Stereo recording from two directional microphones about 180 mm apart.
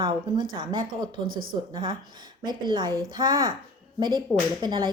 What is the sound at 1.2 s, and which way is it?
Speech, 50° right (ahead or behind).